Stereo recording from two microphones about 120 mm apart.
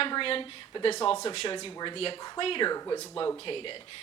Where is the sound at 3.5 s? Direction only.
45° left (ahead or behind).